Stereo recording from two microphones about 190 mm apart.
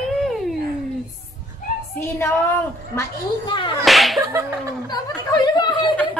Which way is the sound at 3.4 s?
25° left (ahead or behind).